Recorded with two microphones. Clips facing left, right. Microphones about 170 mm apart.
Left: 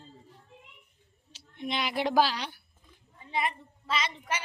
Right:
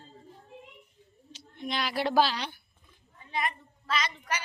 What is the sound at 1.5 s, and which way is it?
A woman's voice, 20° left (ahead or behind).